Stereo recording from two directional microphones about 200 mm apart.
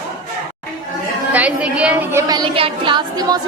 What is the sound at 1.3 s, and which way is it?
A woman's voice, 5° right (ahead or behind).